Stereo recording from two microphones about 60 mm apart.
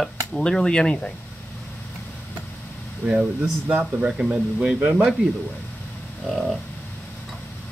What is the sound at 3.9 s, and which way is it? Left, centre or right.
Speech, centre.